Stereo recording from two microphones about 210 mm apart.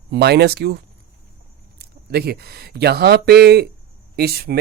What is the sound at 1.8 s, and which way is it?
Speech, 50° right (ahead or behind).